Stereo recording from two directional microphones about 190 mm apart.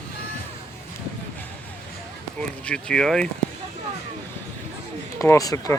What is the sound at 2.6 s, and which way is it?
Speech, 5° left (ahead or behind).